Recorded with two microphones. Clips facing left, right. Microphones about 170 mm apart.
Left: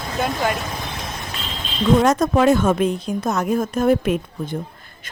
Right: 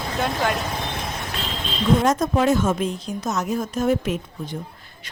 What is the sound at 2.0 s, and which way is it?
A woman's voice, 70° left (ahead or behind).